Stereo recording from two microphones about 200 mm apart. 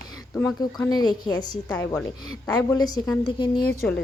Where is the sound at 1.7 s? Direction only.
5° left (ahead or behind).